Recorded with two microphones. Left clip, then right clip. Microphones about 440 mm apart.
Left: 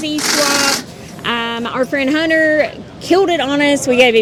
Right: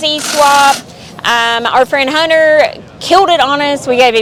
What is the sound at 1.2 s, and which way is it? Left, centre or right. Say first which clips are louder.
Speech: right 8 dB; right.